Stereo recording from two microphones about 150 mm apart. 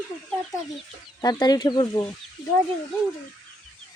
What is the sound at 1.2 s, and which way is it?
Child singing, 25° left (ahead or behind).